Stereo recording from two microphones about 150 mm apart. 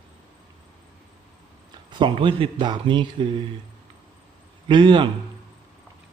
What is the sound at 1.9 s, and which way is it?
A man's voice, 30° right (ahead or behind).